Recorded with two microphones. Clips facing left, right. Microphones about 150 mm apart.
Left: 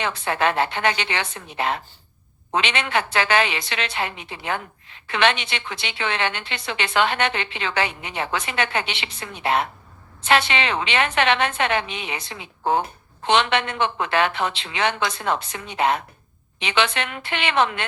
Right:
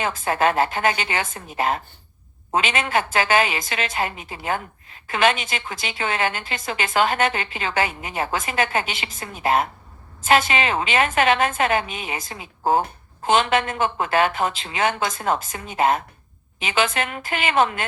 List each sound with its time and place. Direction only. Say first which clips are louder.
0.0 s a woman's voice: right 2 dB; 45° right (ahead or behind)